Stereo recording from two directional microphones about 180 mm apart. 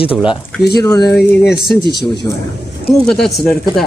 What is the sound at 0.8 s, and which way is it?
Speech, 20° left (ahead or behind).